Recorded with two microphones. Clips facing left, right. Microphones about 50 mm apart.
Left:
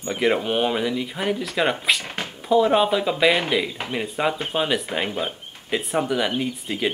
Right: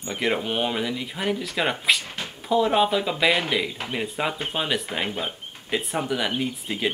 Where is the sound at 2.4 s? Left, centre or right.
Centre.